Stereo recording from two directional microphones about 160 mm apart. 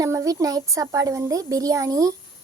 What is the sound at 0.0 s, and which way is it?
A child's voice, 20° right (ahead or behind).